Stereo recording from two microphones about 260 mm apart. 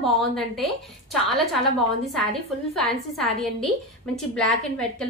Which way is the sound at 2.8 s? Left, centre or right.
Centre.